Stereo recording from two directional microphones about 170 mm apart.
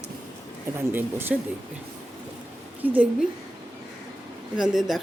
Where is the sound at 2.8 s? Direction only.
10° right (ahead or behind).